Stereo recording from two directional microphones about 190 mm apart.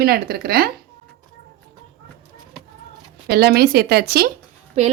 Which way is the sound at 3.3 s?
55° right (ahead or behind).